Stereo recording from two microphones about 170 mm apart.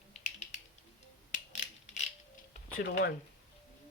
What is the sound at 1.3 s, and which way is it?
Mechanisms, 45° left (ahead or behind).